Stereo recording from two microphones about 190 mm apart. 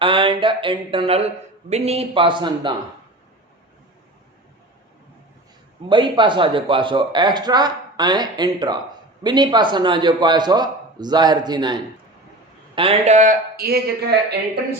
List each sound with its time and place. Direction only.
0.0 s a sound: 25° right (ahead or behind)
1.7 s a man's voice: 35° right (ahead or behind)
5.9 s a man's voice: 25° right (ahead or behind); by 14.6 s 60° right (ahead or behind)